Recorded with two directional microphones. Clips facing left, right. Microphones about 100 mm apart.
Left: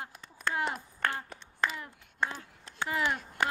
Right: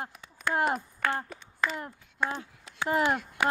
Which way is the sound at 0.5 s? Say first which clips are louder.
Right 9 dB; 45° right (ahead or behind).